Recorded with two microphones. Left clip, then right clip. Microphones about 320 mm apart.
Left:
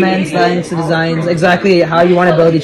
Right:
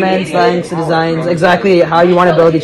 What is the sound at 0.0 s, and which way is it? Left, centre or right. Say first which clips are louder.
A man's voice: right 1 dB; right.